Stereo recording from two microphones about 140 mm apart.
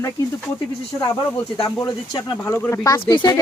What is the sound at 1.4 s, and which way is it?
Speech, 20° left (ahead or behind).